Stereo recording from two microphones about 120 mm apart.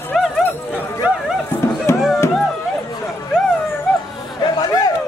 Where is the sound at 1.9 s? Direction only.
25° left (ahead or behind).